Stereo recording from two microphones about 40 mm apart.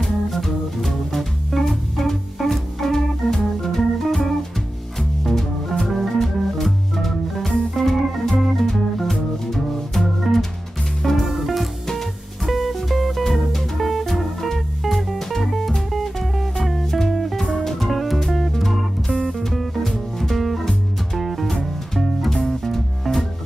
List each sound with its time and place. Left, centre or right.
0.0 s music: centre
11.2 s music: centre